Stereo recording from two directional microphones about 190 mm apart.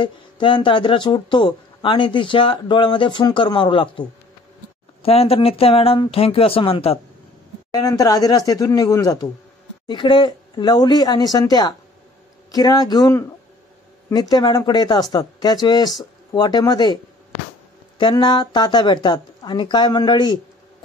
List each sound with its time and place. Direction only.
0.0 s speech: 25° left (ahead or behind)
5.0 s speech: 30° left (ahead or behind)
7.7 s speech: 20° left (ahead or behind)
14.3 s speech: 20° left (ahead or behind)